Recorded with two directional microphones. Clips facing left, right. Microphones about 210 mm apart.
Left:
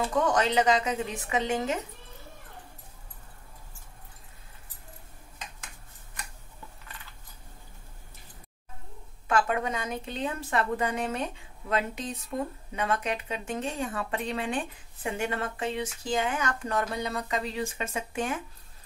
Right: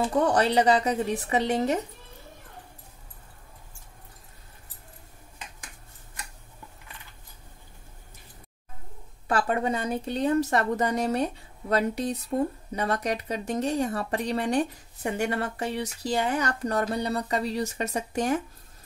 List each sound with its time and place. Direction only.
0.1 s speech: 35° right (ahead or behind)
9.3 s speech: 35° right (ahead or behind)